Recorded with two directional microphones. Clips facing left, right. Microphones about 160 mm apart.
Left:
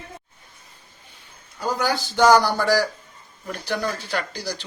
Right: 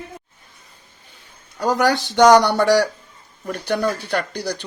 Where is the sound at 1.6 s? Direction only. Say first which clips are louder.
Right 6 dB; 70° right (ahead or behind).